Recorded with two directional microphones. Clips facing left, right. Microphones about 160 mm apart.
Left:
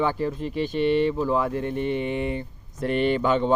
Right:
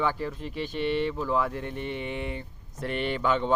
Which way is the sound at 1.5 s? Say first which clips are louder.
Left 8 dB; 50° left (ahead or behind).